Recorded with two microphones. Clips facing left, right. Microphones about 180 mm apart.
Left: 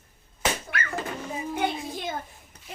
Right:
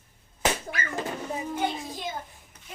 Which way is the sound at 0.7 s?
65° left (ahead or behind).